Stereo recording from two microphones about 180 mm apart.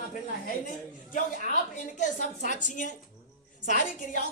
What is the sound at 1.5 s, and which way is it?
A woman's voice, 45° left (ahead or behind).